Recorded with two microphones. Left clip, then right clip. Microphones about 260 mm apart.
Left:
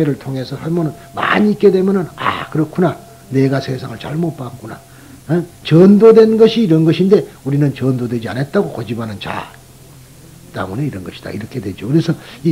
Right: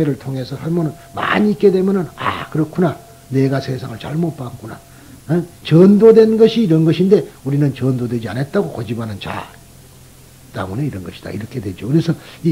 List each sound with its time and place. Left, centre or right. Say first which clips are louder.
0.0 s speech: left 2 dB; right
10.5 s speech: left 2 dB; right